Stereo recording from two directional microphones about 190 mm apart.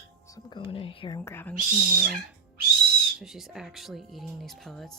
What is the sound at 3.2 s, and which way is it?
Speech, centre (ahead or behind).